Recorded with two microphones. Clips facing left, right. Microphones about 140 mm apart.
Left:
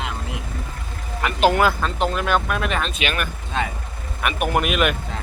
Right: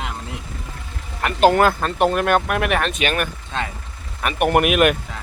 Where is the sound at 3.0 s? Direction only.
45° right (ahead or behind).